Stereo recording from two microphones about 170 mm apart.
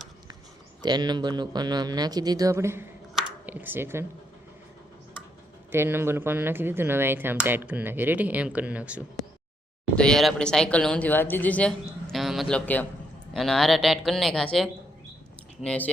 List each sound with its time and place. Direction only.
0.8 s a man's voice: 25° right (ahead or behind)
3.2 s a sound: 10° right (ahead or behind)
5.7 s speech: 15° right (ahead or behind)
9.9 s speech: 5° left (ahead or behind)